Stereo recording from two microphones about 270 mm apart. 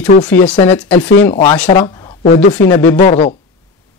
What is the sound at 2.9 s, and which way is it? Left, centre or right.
Speech, left.